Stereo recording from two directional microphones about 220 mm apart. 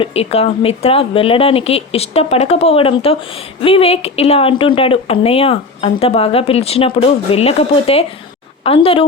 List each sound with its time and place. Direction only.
0.0 s speech: 25° left (ahead or behind)